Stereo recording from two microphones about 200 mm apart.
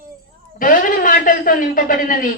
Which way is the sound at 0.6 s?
45° left (ahead or behind).